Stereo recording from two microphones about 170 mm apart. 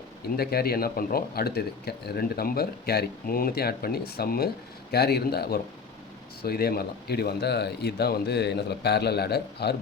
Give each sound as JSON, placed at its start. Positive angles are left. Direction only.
{"t": 0.3, "sound": "speech", "side_deg": 65}